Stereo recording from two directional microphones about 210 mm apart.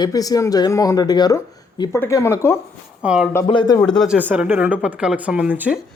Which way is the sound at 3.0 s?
5° right (ahead or behind).